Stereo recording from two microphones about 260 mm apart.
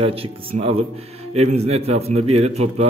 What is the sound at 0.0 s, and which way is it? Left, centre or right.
A man's voice, right.